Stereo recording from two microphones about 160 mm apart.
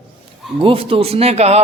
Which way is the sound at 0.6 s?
35° right (ahead or behind).